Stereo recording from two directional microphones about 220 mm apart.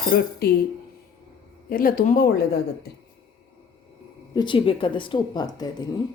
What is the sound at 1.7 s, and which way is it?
Speech, 40° left (ahead or behind).